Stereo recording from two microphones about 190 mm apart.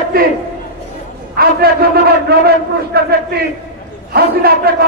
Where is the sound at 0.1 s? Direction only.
50° right (ahead or behind).